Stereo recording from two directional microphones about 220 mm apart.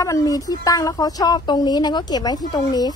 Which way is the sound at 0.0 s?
15° left (ahead or behind).